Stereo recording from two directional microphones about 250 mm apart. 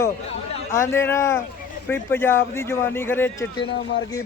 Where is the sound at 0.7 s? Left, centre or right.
Centre.